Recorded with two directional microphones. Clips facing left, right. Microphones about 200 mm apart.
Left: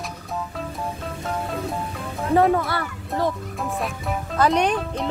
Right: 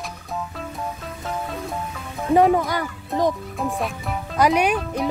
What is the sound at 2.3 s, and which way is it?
A child's voice, 15° right (ahead or behind).